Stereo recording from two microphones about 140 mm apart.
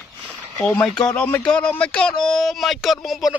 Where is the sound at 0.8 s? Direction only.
5° left (ahead or behind).